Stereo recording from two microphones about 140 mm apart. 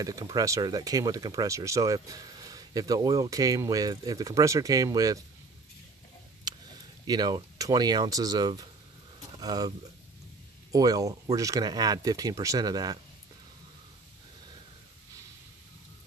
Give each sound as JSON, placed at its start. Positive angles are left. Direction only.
{"t": 0.0, "sound": "speech", "side_deg": -25}
{"t": 6.5, "sound": "a sound", "side_deg": -30}
{"t": 7.1, "sound": "speech", "side_deg": -30}
{"t": 10.7, "sound": "speech", "side_deg": -25}